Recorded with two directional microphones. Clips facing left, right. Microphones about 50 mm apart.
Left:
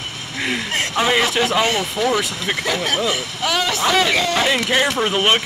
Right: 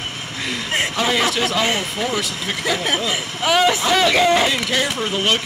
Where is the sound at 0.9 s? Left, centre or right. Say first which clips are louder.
Left 4 dB; left.